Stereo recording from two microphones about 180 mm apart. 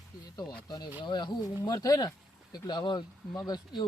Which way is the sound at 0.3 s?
20° left (ahead or behind).